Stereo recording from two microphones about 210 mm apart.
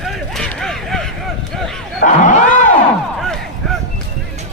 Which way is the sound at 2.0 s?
40° left (ahead or behind).